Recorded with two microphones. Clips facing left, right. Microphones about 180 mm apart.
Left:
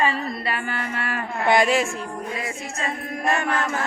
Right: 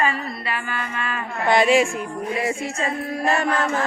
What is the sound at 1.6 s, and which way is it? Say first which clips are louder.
Chant: right 4 dB; 10° right (ahead or behind).